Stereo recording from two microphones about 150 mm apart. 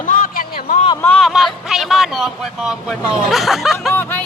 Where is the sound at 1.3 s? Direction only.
Centre (ahead or behind).